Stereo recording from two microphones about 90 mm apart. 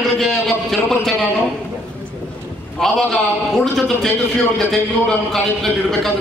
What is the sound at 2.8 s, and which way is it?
A man's voice, 5° left (ahead or behind).